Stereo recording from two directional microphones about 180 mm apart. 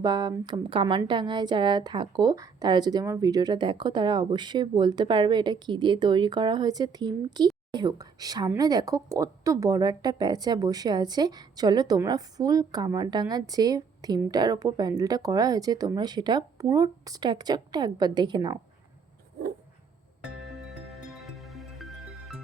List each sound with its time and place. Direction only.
0.0 s a woman's voice: 25° right (ahead or behind)
20.2 s music: centre (ahead or behind)